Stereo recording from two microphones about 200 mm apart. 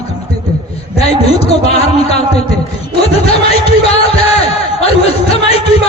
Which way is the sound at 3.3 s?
30° left (ahead or behind).